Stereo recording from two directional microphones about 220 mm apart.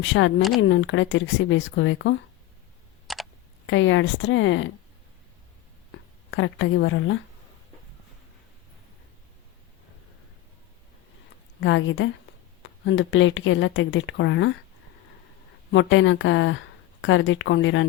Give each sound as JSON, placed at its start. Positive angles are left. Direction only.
{"t": 0.0, "sound": "speech", "side_deg": 60}
{"t": 3.1, "sound": "a sound", "side_deg": 0}
{"t": 3.7, "sound": "speech", "side_deg": 60}
{"t": 5.9, "sound": "speech", "side_deg": 60}
{"t": 11.6, "sound": "speech", "side_deg": 60}
{"t": 15.7, "sound": "speech", "side_deg": 60}